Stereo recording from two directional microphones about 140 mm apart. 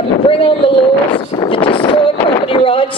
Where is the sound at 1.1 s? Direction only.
35° left (ahead or behind).